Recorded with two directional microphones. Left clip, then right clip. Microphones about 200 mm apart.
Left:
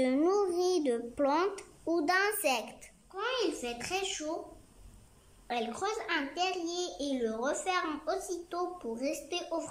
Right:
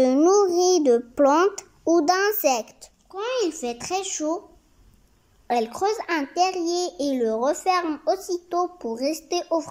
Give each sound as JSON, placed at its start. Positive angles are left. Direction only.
{"t": 0.0, "sound": "a sound", "side_deg": -20}
{"t": 0.4, "sound": "a child's voice", "side_deg": -20}
{"t": 5.5, "sound": "a child's voice", "side_deg": -25}